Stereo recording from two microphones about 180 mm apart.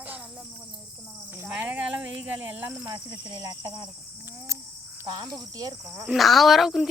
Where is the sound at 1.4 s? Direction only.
10° right (ahead or behind).